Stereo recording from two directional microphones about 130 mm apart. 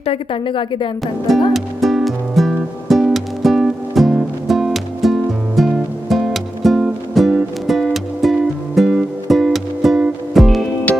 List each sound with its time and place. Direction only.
0.0 s a woman's voice: 45° left (ahead or behind)
1.5 s music: centre (ahead or behind)